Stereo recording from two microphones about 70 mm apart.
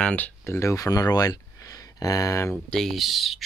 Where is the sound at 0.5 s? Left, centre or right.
Left.